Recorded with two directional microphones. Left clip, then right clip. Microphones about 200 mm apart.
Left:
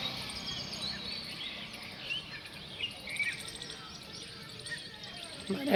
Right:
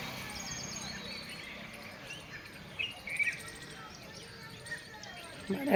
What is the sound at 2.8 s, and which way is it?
Bird, 40° left (ahead or behind).